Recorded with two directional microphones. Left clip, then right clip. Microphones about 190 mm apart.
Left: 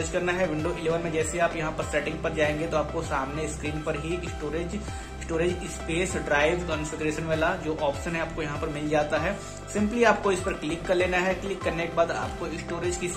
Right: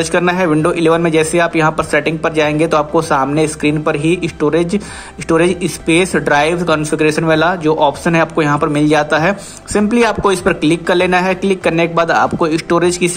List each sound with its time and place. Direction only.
0.1 s a man's voice: 40° right (ahead or behind)